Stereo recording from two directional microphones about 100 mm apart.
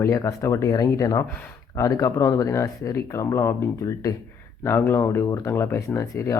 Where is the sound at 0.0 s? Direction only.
30° left (ahead or behind).